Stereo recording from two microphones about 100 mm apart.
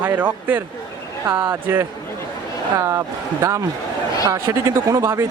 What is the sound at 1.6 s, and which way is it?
Speech, 20° right (ahead or behind).